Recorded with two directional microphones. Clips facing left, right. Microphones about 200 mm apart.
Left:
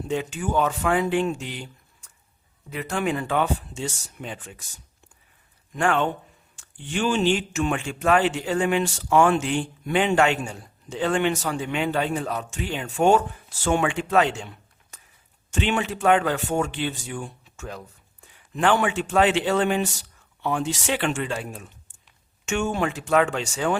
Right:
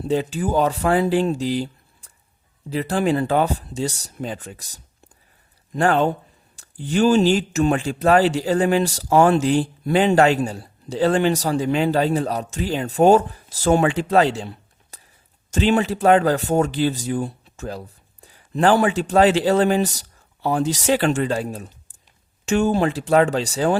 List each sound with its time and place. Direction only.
0.0 s speech: 35° right (ahead or behind)